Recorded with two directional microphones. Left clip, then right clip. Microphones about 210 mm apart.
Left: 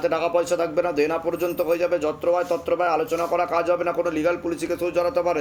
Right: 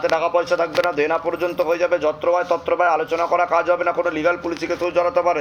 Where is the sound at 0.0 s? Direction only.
35° left (ahead or behind).